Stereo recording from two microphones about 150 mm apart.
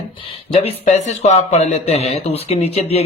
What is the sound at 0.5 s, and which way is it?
A man's voice, 40° left (ahead or behind).